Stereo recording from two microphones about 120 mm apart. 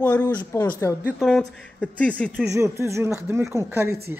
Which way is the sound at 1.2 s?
Centre (ahead or behind).